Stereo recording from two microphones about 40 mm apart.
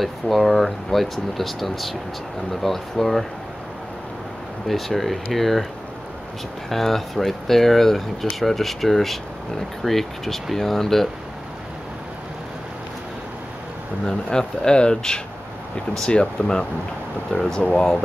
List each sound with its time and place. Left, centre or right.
0.0 s speech: centre
4.6 s speech: centre
6.7 s speech: centre
14.0 s speech: centre